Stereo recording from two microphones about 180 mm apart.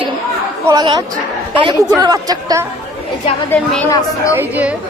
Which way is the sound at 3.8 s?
20° left (ahead or behind).